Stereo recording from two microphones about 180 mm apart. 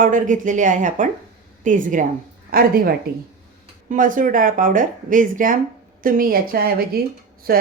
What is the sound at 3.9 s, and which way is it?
A woman's voice, 45° right (ahead or behind).